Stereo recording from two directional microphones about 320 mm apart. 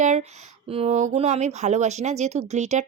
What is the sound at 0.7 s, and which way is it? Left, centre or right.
Speech, centre.